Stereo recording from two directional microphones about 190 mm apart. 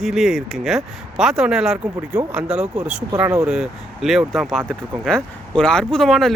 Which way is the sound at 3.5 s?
Centre (ahead or behind).